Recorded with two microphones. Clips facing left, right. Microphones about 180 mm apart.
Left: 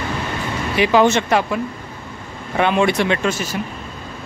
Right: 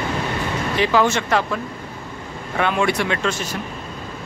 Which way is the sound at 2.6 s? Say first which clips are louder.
Left 3 dB; 20° left (ahead or behind).